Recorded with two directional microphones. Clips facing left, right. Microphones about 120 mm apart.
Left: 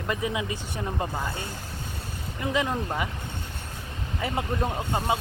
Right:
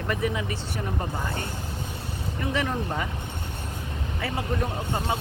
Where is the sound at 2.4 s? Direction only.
15° left (ahead or behind).